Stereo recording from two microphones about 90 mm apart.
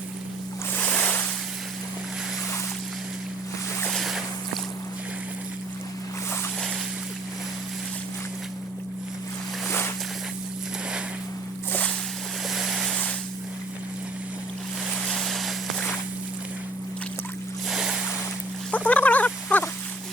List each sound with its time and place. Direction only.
0.8 s ocean: 15° left (ahead or behind)
3.9 s boat: centre (ahead or behind)
12.5 s boat: centre (ahead or behind)
15.1 s a sound: 5° left (ahead or behind)
17.7 s boat: 5° right (ahead or behind)
18.7 s a sound: 15° left (ahead or behind)